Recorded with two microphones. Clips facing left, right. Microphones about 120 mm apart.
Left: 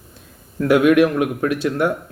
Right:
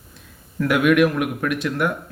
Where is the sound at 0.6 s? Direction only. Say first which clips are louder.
Left 3 dB; 35° left (ahead or behind).